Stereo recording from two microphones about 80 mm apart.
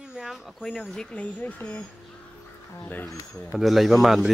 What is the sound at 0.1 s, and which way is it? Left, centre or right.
Speech, centre.